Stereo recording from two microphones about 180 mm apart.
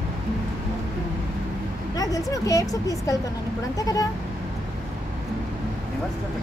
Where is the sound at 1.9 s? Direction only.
20° left (ahead or behind).